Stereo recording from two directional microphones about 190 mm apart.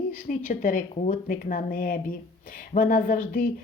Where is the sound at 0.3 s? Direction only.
45° left (ahead or behind).